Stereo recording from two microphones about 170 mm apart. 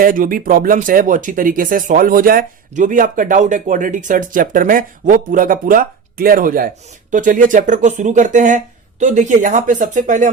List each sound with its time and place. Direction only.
0.0 s speech: 55° right (ahead or behind)